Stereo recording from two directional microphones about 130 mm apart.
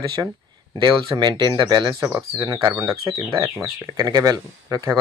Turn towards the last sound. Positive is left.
turn(degrees=-25)  # may be behind; listen again after turning